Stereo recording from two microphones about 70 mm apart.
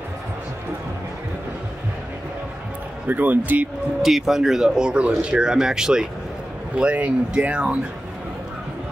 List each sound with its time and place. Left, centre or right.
3.1 s speech: right
4.0 s speech: centre